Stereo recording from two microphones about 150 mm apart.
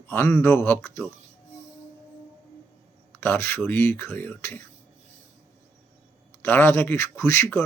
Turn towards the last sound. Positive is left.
turn(degrees=15)  # may be behind; listen again after turning